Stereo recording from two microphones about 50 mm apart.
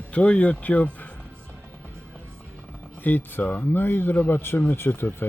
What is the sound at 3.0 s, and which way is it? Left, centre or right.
Speech, left.